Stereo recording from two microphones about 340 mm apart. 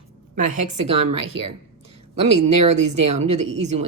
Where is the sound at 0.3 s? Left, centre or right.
Right.